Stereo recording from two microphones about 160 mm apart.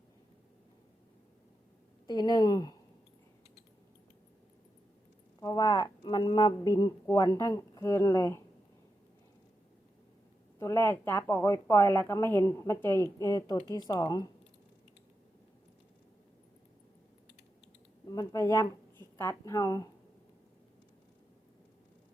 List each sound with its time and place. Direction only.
2.0 s speech: 25° left (ahead or behind)
5.4 s speech: 25° left (ahead or behind)
10.6 s a woman's voice: 15° left (ahead or behind)
18.1 s speech: 20° left (ahead or behind)